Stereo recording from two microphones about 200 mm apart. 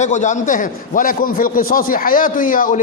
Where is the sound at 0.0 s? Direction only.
40° left (ahead or behind).